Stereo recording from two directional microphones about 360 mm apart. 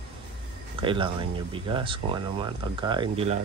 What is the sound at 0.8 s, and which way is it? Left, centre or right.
Speech, centre.